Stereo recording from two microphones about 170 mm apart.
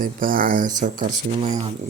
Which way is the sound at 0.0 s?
55° right (ahead or behind).